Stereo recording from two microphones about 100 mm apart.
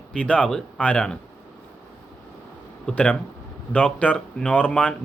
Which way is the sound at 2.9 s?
15° left (ahead or behind).